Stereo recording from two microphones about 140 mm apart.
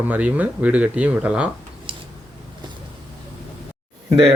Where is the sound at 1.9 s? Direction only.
40° right (ahead or behind).